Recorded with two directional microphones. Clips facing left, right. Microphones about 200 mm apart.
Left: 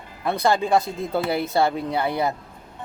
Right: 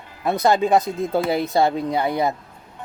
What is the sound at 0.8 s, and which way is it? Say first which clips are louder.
Speech: right 4 dB; centre (ahead or behind).